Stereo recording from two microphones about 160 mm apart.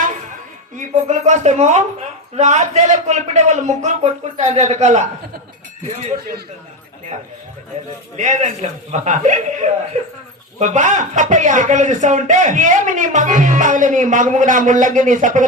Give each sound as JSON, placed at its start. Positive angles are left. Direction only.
{"t": 0.8, "sound": "speech", "side_deg": -50}
{"t": 8.1, "sound": "speech", "side_deg": -45}